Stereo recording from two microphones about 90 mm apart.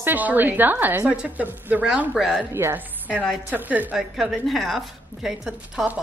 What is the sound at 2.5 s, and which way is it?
A woman's voice, 30° right (ahead or behind).